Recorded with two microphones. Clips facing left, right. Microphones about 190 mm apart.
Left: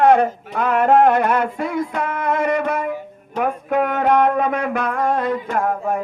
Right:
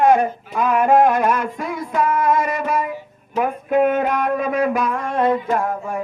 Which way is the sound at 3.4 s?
70° left (ahead or behind).